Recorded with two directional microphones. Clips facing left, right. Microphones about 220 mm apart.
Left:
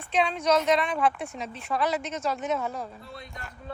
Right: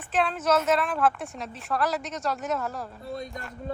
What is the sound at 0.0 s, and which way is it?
A woman's voice, 5° right (ahead or behind).